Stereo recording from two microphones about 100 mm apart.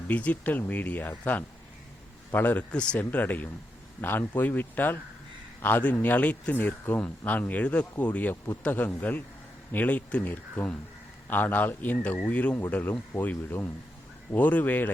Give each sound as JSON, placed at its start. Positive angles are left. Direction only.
{"t": 0.1, "sound": "speech", "side_deg": 15}